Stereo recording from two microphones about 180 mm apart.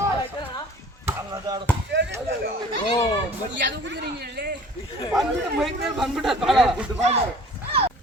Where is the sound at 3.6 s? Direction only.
75° right (ahead or behind).